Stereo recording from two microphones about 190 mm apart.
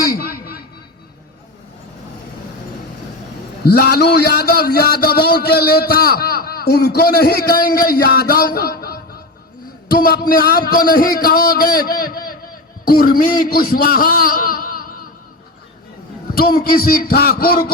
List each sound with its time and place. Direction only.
0.2 s a sound: 55° left (ahead or behind)
3.6 s a man's voice: 55° left (ahead or behind)
16.3 s a man's voice: 50° left (ahead or behind)